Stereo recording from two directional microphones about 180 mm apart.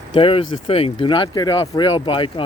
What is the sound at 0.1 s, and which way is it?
Speech, 30° left (ahead or behind).